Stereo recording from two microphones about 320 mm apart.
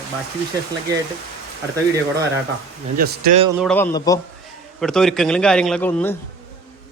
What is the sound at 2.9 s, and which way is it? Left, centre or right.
Speech, right.